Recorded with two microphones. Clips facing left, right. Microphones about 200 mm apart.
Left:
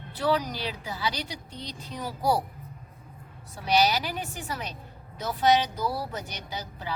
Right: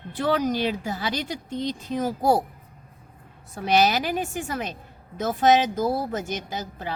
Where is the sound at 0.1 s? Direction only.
50° right (ahead or behind).